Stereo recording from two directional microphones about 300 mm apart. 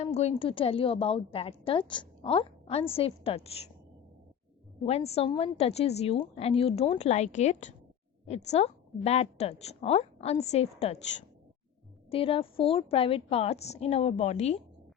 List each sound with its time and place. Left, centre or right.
0.0 s a woman's voice: left
4.9 s a woman's voice: left
12.1 s a woman's voice: centre